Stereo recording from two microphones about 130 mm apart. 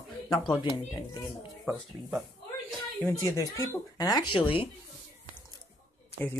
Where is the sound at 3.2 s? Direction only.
20° left (ahead or behind).